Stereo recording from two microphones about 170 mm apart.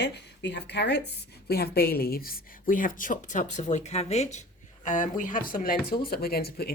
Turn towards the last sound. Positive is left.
turn(degrees=65)  # may be behind; listen again after turning